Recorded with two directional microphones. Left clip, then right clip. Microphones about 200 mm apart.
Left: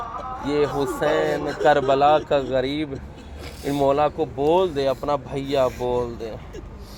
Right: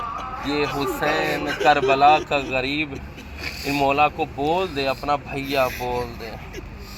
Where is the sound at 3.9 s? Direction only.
55° left (ahead or behind).